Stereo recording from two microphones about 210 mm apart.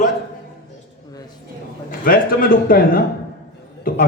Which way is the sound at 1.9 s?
45° left (ahead or behind).